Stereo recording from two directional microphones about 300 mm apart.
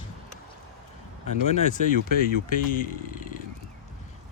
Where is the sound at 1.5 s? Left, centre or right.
Left.